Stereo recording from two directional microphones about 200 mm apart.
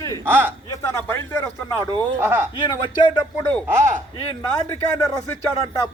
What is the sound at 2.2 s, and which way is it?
Speech, 10° right (ahead or behind).